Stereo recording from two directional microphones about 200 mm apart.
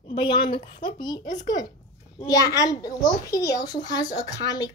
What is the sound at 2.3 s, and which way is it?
A child's voice, 15° left (ahead or behind).